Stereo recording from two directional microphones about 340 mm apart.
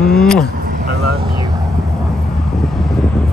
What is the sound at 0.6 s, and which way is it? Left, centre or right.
Vehicle, right.